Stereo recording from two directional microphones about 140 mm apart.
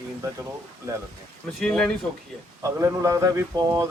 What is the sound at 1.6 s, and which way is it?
Speech, 5° left (ahead or behind).